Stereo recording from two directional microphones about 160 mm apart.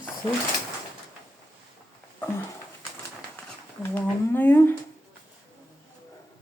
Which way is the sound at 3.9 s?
10° left (ahead or behind).